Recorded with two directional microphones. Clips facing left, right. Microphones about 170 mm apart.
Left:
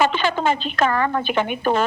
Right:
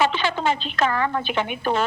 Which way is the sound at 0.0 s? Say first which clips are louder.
Left 2 dB; 50° left (ahead or behind).